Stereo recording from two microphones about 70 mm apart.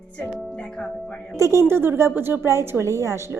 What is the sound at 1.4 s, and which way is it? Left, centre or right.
A woman's voice, right.